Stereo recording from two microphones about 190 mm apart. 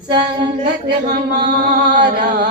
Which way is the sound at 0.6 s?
60° right (ahead or behind).